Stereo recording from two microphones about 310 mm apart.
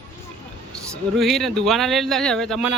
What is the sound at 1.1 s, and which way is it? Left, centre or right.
Speech, centre.